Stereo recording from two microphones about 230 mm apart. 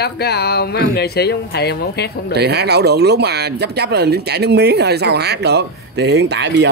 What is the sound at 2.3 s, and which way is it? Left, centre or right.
Speech, right.